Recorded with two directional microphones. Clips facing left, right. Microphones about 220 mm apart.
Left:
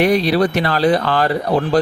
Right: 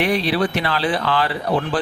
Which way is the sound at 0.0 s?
40° left (ahead or behind).